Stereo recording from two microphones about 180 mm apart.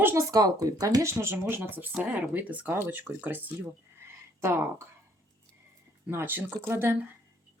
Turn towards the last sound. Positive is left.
turn(degrees=-15)  # may be behind; listen again after turning